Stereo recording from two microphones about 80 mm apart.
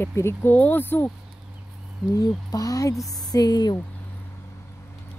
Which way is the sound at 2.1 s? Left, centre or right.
Left.